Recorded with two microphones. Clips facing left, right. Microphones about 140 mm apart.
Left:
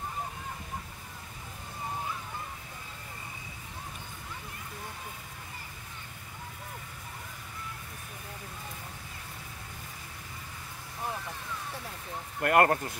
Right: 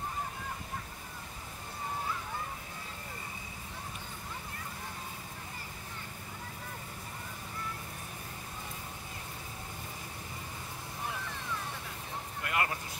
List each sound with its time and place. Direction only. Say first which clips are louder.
12.4 s speech: left 11 dB; 55° left (ahead or behind)